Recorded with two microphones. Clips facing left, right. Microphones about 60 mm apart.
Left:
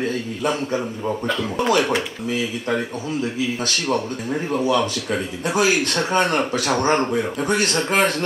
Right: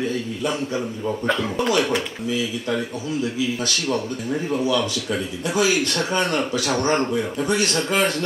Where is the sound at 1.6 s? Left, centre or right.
Left.